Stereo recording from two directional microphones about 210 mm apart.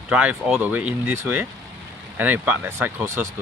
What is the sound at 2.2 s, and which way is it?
Speech, 10° right (ahead or behind).